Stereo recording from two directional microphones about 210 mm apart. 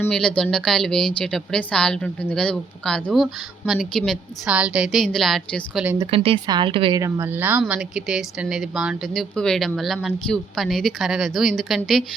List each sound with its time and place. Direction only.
0.0 s speech: 5° left (ahead or behind)
5.8 s speech: 10° right (ahead or behind)
6.1 s speech: 25° right (ahead or behind); by 12.0 s centre (ahead or behind)